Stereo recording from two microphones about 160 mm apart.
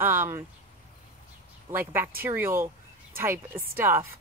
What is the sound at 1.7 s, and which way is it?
Speech, 15° right (ahead or behind).